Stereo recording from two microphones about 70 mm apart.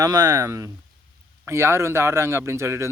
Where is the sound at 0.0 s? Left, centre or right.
Right.